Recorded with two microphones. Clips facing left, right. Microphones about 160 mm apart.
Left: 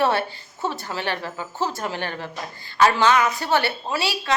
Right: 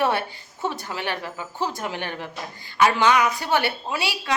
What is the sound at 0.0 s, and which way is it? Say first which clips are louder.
A woman's voice: left 2 dB; 15° right (ahead or behind).